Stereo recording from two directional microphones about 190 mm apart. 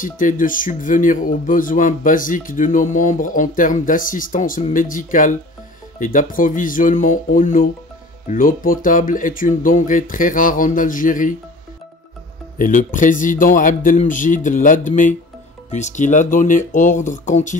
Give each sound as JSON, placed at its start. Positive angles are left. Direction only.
{"t": 0.0, "sound": "speech", "side_deg": 45}
{"t": 12.5, "sound": "speech", "side_deg": 45}